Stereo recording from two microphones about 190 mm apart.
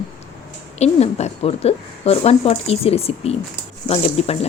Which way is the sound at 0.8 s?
35° left (ahead or behind).